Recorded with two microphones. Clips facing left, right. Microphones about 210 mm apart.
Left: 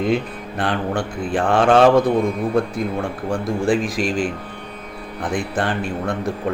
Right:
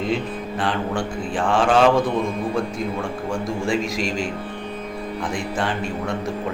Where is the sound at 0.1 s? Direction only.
60° left (ahead or behind).